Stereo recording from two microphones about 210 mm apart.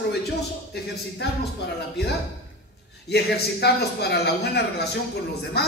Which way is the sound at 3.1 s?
50° left (ahead or behind).